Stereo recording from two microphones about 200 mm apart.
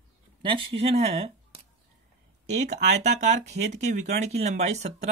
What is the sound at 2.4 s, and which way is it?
Speech, 35° right (ahead or behind).